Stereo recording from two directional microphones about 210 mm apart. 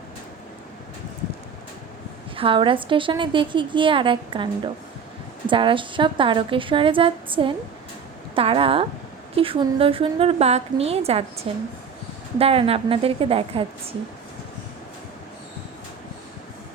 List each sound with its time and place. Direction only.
2.3 s a woman's voice: 25° right (ahead or behind)
12.4 s a woman's voice: 30° right (ahead or behind)